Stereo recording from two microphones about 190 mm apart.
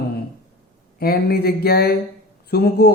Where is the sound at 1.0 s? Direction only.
55° left (ahead or behind).